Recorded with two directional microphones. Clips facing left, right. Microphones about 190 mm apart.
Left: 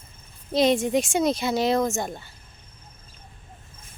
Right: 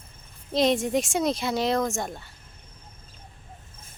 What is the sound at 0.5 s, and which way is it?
Speech, centre (ahead or behind).